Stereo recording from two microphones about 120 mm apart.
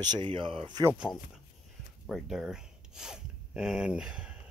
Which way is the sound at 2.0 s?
Centre (ahead or behind).